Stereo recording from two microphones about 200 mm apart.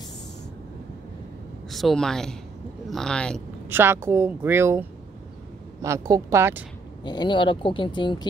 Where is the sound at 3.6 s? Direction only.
10° right (ahead or behind).